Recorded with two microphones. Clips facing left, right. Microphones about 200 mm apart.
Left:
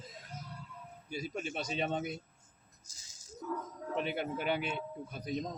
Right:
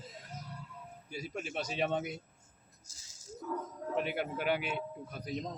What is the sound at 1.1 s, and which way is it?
A man's voice, 10° right (ahead or behind).